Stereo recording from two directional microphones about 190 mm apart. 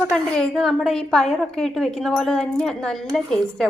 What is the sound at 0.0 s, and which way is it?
A woman's voice, 5° left (ahead or behind).